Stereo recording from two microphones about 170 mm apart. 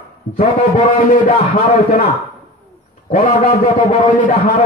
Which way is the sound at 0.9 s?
50° left (ahead or behind).